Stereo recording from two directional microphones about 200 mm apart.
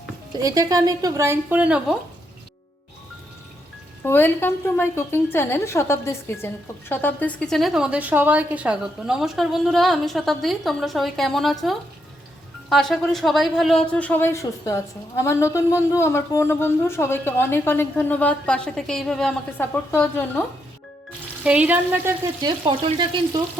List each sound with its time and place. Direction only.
0.3 s speech: 20° right (ahead or behind)
4.0 s a woman's voice: 10° left (ahead or behind)
21.4 s speech: 5° right (ahead or behind); by 23.4 s 25° right (ahead or behind)